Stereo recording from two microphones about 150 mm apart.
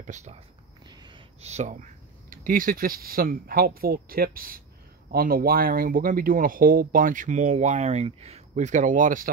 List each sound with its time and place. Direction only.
0.0 s speech: 50° right (ahead or behind)
0.8 s snort: 30° right (ahead or behind)
1.4 s speech: 50° right (ahead or behind)